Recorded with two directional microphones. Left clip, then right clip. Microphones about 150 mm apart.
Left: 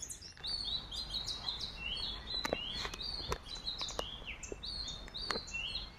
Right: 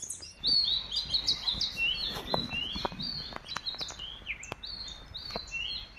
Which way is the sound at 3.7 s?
90° left.